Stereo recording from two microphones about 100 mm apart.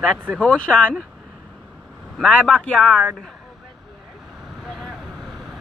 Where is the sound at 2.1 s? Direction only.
5° left (ahead or behind).